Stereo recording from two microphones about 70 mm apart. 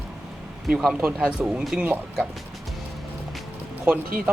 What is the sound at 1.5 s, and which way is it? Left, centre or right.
Speech, centre.